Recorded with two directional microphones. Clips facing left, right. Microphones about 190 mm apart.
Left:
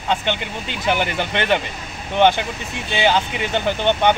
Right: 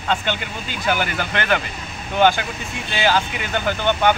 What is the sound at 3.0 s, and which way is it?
Speech, 20° left (ahead or behind).